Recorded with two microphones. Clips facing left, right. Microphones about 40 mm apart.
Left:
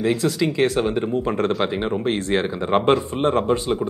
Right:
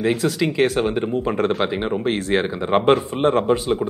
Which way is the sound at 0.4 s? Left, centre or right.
Centre.